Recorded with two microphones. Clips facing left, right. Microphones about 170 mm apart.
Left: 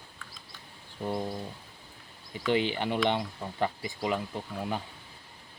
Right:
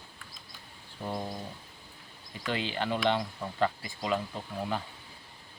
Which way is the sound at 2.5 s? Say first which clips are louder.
Left 4 dB; 15° left (ahead or behind).